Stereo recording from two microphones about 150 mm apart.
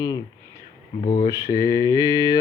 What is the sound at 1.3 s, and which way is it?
Mantra, 20° left (ahead or behind).